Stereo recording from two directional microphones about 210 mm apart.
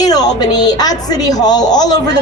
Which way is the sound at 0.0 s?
20° left (ahead or behind).